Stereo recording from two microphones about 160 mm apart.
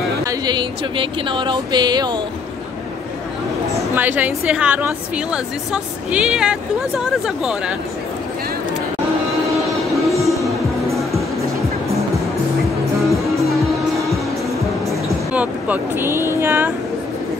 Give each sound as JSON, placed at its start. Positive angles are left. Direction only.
{"t": 0.2, "sound": "speech", "side_deg": -25}
{"t": 3.9, "sound": "a woman's voice", "side_deg": -10}
{"t": 10.0, "sound": "music", "side_deg": 0}
{"t": 15.0, "sound": "speech", "side_deg": -10}